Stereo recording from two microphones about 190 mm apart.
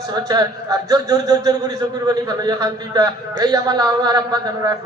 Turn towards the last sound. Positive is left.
turn(degrees=-20)  # may be behind; listen again after turning